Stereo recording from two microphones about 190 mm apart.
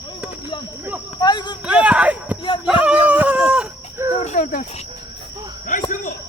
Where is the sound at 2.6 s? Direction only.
5° right (ahead or behind).